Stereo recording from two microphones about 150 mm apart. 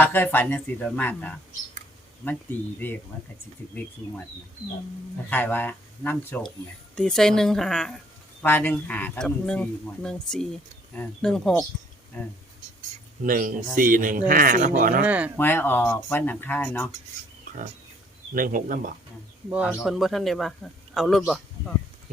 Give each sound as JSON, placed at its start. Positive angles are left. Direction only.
{"t": 0.0, "sound": "speech", "side_deg": 15}
{"t": 2.7, "sound": "speech", "side_deg": 10}
{"t": 5.3, "sound": "a woman's voice", "side_deg": 10}
{"t": 13.2, "sound": "speech", "side_deg": -65}
{"t": 15.0, "sound": "speech", "side_deg": -10}
{"t": 15.4, "sound": "speech", "side_deg": 15}
{"t": 18.3, "sound": "speech", "side_deg": -65}
{"t": 19.5, "sound": "speech", "side_deg": -10}